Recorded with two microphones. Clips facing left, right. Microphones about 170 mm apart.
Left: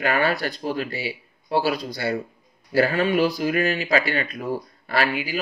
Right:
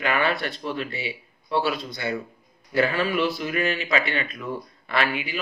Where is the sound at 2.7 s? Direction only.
35° left (ahead or behind).